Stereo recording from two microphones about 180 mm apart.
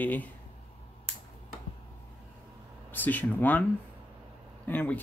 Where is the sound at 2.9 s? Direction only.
10° left (ahead or behind).